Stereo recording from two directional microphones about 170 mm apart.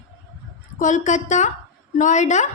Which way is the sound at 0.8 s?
45° left (ahead or behind).